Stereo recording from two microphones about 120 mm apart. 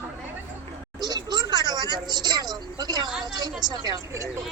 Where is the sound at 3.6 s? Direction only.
35° right (ahead or behind).